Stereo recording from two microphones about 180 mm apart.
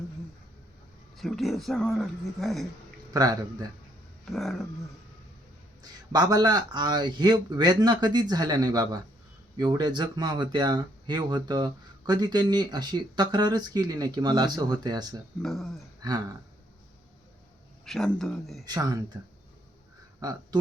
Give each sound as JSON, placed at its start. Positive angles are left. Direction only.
{"t": 1.1, "sound": "speech", "side_deg": 0}
{"t": 3.1, "sound": "speech", "side_deg": -20}
{"t": 4.3, "sound": "speech", "side_deg": 0}
{"t": 6.1, "sound": "speech", "side_deg": -20}
{"t": 15.4, "sound": "speech", "side_deg": 0}
{"t": 16.0, "sound": "speech", "side_deg": -20}
{"t": 17.8, "sound": "speech", "side_deg": 5}
{"t": 18.6, "sound": "speech", "side_deg": -20}
{"t": 20.1, "sound": "speech", "side_deg": -20}